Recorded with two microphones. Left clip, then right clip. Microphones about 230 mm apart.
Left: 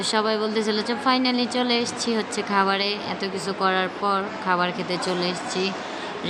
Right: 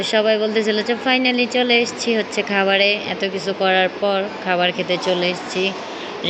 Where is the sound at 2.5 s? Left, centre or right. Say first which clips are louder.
Right 6 dB; centre.